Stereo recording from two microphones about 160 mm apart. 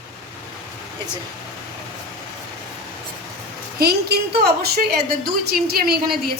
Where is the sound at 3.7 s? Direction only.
80° right.